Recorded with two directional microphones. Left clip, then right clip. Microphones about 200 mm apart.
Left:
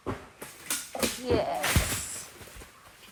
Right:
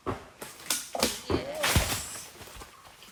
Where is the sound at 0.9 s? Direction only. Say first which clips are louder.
Left 3 dB; 35° right (ahead or behind).